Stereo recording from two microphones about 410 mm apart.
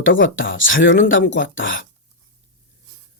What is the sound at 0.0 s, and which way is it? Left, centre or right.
Speech, left.